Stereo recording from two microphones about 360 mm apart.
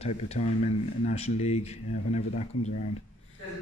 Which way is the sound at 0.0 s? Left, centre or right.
Centre.